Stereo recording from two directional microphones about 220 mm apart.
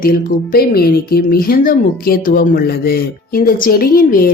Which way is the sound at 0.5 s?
45° left (ahead or behind).